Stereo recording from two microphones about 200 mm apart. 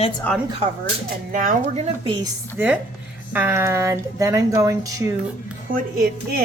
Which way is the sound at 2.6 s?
10° right (ahead or behind).